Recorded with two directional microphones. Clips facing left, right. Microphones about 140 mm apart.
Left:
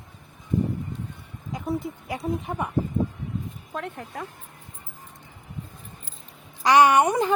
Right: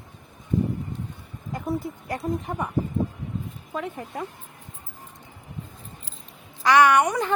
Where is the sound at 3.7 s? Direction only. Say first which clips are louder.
Right 3 dB; 5° right (ahead or behind).